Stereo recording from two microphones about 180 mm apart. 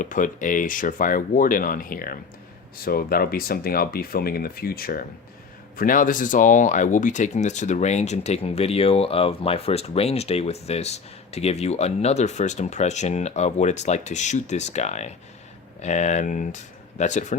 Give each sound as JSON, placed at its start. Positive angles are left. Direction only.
{"t": 0.0, "sound": "speech", "side_deg": 45}